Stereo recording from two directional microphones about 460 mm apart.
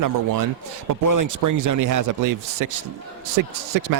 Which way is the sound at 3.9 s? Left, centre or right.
Right.